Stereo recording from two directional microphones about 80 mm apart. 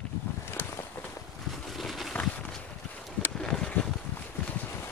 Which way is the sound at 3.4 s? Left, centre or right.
Centre.